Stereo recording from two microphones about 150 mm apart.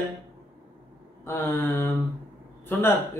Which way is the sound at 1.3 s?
15° left (ahead or behind).